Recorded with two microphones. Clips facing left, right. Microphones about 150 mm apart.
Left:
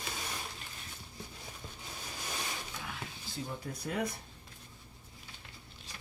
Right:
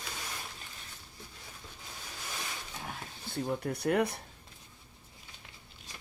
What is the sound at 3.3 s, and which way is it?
Speech, 60° right (ahead or behind).